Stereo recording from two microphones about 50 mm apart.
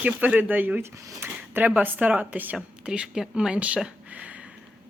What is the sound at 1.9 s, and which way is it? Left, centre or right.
Speech, right.